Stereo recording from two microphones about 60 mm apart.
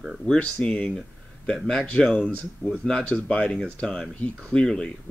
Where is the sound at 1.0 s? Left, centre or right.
Centre.